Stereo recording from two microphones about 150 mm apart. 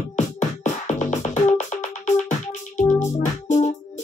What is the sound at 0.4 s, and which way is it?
Music, 55° left (ahead or behind).